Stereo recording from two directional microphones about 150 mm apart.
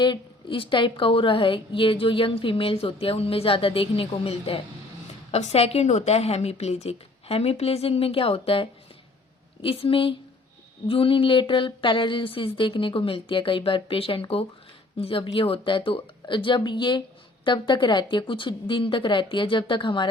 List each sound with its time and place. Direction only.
0.0 s a woman's voice: 30° left (ahead or behind)